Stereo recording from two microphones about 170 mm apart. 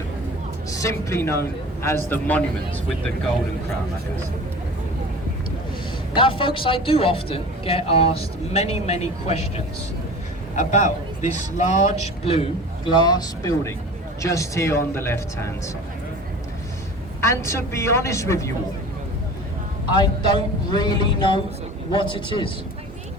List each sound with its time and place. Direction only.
0.7 s a man's voice: 20° left (ahead or behind)
6.1 s speech: 30° left (ahead or behind)
10.5 s a man's voice: 45° left (ahead or behind); by 15.7 s 15° left (ahead or behind)
17.2 s a man's voice: 15° left (ahead or behind)
20.0 s speech: 25° left (ahead or behind)